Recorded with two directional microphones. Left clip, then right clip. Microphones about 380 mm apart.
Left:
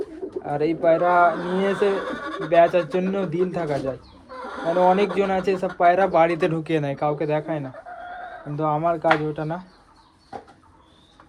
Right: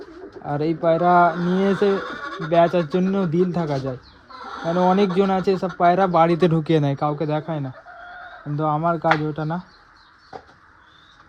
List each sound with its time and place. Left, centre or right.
0.4 s speech: centre